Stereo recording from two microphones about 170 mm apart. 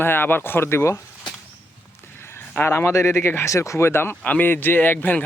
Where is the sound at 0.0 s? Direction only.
10° left (ahead or behind).